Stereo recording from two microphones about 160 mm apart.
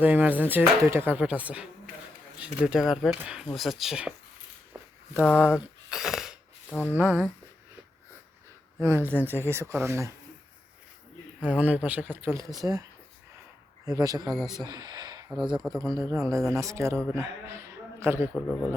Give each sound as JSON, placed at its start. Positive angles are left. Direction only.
{"t": 0.0, "sound": "speech", "side_deg": -10}
{"t": 5.2, "sound": "speech", "side_deg": 15}
{"t": 5.5, "sound": "a sound", "side_deg": -5}
{"t": 6.9, "sound": "speech", "side_deg": -10}
{"t": 8.8, "sound": "speech", "side_deg": -15}
{"t": 11.4, "sound": "a man's voice", "side_deg": -10}
{"t": 18.3, "sound": "speech", "side_deg": 5}